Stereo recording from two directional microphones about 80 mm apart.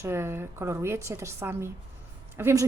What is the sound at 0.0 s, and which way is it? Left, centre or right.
Speech, right.